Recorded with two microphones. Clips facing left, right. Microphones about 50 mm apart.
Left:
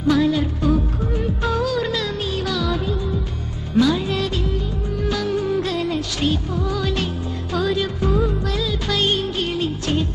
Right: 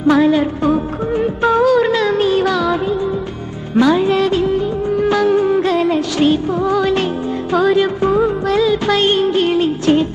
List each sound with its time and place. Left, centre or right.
0.0 s music: right
3.7 s music of bollywood: right
7.5 s music: right